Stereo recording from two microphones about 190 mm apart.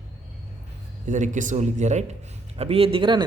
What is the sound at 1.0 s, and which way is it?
A man's voice, 40° right (ahead or behind).